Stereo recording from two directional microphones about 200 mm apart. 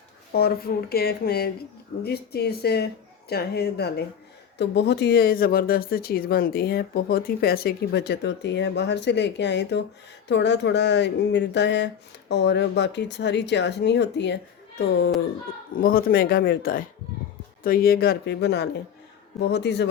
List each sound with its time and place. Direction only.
0.3 s speech: 50° left (ahead or behind)
15.7 s speech: 45° left (ahead or behind)